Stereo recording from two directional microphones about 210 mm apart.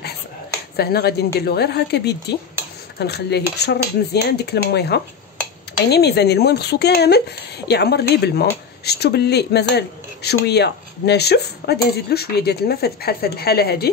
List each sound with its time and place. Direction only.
0.7 s speech: 50° left (ahead or behind)